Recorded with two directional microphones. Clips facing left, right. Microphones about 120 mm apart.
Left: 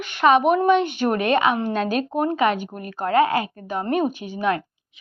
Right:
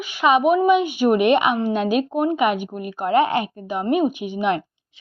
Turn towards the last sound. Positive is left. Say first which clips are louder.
# right 2 dB
turn(degrees=-20)  # may be behind; listen again after turning